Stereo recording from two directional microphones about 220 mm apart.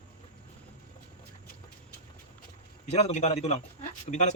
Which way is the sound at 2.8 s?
30° left (ahead or behind).